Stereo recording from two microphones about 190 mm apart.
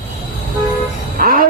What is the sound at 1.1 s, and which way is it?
Music, 50° right (ahead or behind).